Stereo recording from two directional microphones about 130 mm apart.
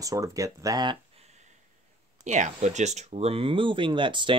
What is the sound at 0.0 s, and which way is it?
Speech, 25° right (ahead or behind).